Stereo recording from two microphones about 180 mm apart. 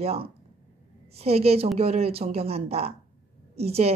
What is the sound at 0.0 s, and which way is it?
A woman's voice, 35° right (ahead or behind).